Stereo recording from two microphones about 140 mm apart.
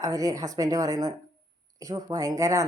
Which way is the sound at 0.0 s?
25° right (ahead or behind).